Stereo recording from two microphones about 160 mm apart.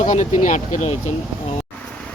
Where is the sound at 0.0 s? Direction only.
50° left (ahead or behind).